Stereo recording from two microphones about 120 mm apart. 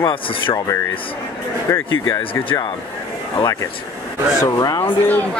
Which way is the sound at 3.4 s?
30° left (ahead or behind).